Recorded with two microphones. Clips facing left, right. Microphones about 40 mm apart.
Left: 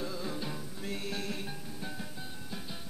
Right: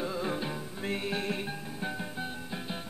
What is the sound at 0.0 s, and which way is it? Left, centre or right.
Music, right.